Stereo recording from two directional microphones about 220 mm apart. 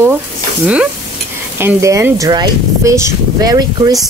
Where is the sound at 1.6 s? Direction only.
15° right (ahead or behind).